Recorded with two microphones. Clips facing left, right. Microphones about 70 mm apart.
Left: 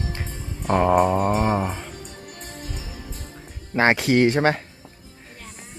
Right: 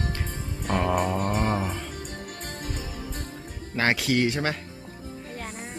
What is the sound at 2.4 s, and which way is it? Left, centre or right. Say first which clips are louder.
Music: even; right.